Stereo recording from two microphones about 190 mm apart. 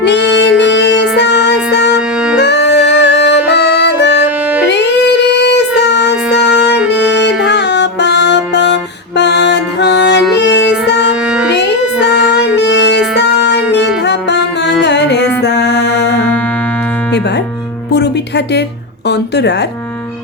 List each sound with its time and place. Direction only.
0.0 s music: 65° left (ahead or behind)
4.7 s child singing: 65° left (ahead or behind)
7.2 s music: 65° left (ahead or behind)
17.9 s music: 60° left (ahead or behind)
19.0 s a sound: 60° left (ahead or behind)